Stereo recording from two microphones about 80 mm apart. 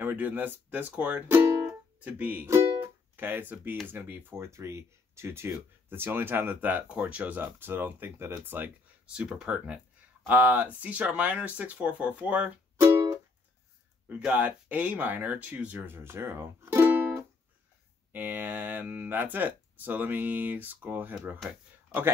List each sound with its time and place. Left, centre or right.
0.0 s speech: right
1.7 s music: centre
3.8 s speech: right
9.0 s speech: centre
14.0 s speech: centre